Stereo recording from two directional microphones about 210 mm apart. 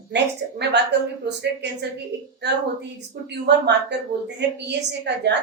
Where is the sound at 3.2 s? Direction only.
55° right (ahead or behind).